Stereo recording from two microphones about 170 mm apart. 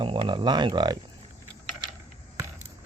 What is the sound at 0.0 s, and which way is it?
Speech, 30° right (ahead or behind).